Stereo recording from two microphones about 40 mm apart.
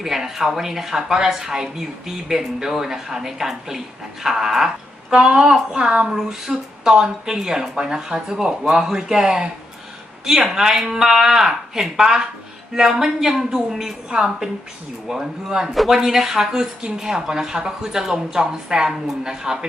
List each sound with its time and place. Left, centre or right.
0.0 s speech: centre
5.1 s speech: right
6.1 s speech: centre